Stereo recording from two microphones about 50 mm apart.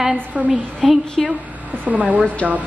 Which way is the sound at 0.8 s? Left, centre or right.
Centre.